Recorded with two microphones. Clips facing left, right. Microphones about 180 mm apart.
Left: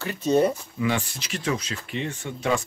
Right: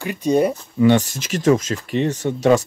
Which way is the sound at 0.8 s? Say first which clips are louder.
Right 11 dB; 40° right (ahead or behind).